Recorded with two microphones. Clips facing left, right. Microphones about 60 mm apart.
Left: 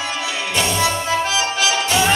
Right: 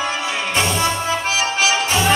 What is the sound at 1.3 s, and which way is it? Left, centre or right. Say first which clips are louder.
Music: right 1 dB; right.